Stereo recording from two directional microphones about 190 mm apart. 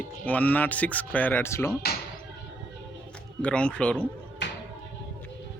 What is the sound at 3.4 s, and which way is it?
Speech, 5° left (ahead or behind).